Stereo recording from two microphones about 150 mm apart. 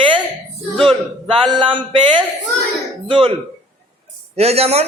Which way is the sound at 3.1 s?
35° right (ahead or behind).